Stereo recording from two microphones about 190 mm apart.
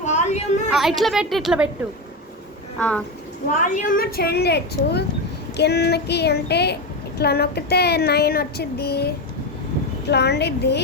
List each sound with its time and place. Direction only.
0.0 s a sound: 35° left (ahead or behind)
0.8 s a woman's voice: centre (ahead or behind)
2.7 s speech: 5° left (ahead or behind)
3.5 s child singing: 40° left (ahead or behind); by 10.8 s 60° left (ahead or behind)